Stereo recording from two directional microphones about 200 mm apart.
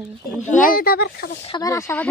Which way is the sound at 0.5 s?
45° left (ahead or behind).